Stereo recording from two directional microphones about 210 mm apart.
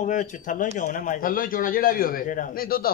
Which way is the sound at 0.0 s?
40° left (ahead or behind).